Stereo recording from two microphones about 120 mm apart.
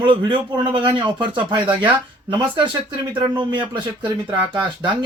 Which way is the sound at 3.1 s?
40° right (ahead or behind).